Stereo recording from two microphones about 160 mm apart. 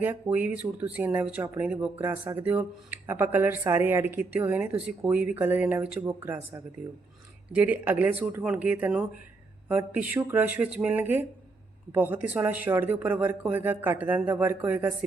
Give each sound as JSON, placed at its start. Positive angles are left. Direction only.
{"t": 0.0, "sound": "speech", "side_deg": -10}
{"t": 7.5, "sound": "speech", "side_deg": -10}